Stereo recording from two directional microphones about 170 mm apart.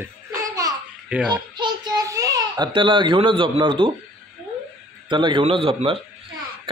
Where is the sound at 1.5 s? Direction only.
25° right (ahead or behind).